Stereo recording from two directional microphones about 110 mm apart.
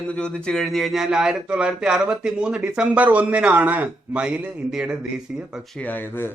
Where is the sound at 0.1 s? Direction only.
10° left (ahead or behind); by 4.9 s 5° right (ahead or behind).